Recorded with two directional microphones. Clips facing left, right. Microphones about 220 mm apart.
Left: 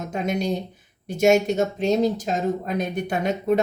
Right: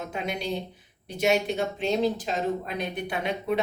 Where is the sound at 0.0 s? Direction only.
45° left (ahead or behind).